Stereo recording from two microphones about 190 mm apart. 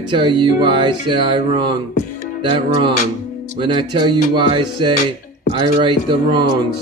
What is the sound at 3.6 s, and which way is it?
Speech, 25° right (ahead or behind).